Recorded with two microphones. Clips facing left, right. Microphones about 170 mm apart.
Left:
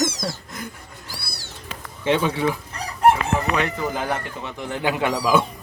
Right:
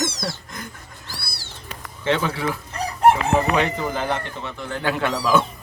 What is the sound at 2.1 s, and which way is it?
Speech, 15° left (ahead or behind).